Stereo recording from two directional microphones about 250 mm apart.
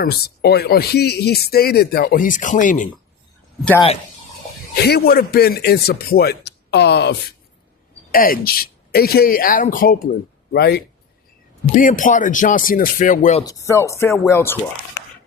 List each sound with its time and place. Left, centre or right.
0.0 s speech: left
3.6 s speech: centre
4.8 s speech: left
13.4 s speech: centre